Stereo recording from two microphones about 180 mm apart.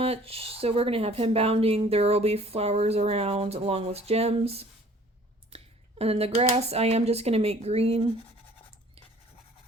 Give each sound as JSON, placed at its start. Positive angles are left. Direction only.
{"t": 0.0, "sound": "speech", "side_deg": -30}